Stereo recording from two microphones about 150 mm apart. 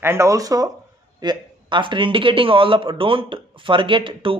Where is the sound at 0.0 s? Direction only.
20° right (ahead or behind).